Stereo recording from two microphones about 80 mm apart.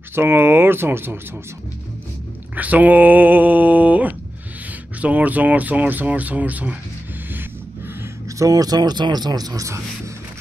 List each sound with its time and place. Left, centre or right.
0.1 s speech: right
2.5 s speech: centre
8.3 s speech: right